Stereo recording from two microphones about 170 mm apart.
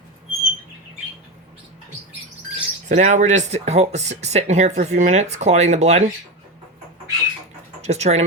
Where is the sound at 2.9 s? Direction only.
45° right (ahead or behind).